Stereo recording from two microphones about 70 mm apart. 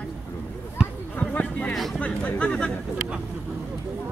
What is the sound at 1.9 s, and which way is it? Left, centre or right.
Speech, left.